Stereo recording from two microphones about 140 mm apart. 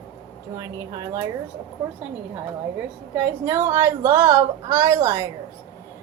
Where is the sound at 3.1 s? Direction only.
15° right (ahead or behind).